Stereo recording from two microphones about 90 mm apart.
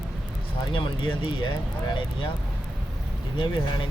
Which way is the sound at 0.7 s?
65° left (ahead or behind).